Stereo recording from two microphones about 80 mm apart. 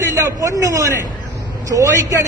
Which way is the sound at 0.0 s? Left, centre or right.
Right.